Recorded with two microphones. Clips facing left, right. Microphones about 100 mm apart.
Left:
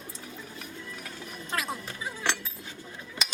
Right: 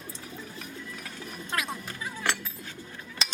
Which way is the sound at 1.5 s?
Centre (ahead or behind).